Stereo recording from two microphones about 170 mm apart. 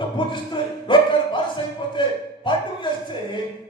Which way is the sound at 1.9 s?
30° left (ahead or behind).